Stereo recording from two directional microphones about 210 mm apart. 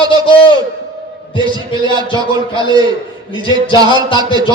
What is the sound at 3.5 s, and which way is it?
A man's voice, 20° right (ahead or behind).